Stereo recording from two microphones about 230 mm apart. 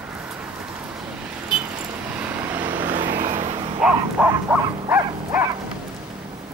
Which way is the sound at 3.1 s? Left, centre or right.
Right.